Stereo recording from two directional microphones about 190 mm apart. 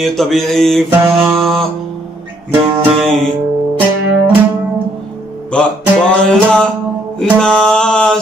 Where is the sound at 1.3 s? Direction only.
Centre (ahead or behind).